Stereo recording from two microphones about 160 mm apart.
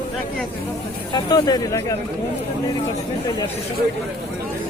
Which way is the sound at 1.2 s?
25° left (ahead or behind).